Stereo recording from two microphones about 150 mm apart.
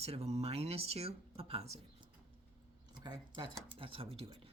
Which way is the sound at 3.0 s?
30° right (ahead or behind).